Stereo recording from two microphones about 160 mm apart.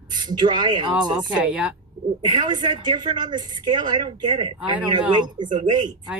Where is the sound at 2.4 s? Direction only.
30° right (ahead or behind).